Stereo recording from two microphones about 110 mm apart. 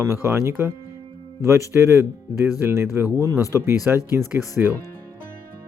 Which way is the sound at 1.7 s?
25° right (ahead or behind).